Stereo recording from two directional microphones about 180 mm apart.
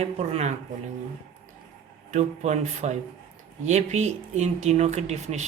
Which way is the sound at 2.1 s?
40° right (ahead or behind).